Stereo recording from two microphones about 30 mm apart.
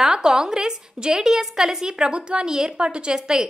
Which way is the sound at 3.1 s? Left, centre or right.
Right.